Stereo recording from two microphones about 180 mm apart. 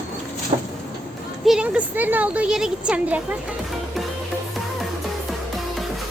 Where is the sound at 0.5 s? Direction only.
40° right (ahead or behind).